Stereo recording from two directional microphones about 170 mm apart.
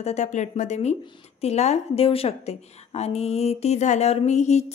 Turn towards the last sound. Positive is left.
turn(degrees=40)  # may be behind; listen again after turning